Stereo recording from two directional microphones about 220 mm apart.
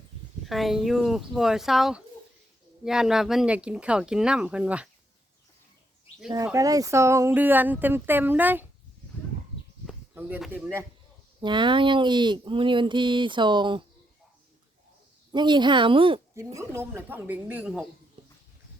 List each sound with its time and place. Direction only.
0.4 s speech: centre (ahead or behind)
6.3 s speech: 15° right (ahead or behind)
9.8 s speech: 5° right (ahead or behind)
11.3 s speech: 20° right (ahead or behind)
15.3 s speech: 20° right (ahead or behind)
16.6 s speech: 10° right (ahead or behind)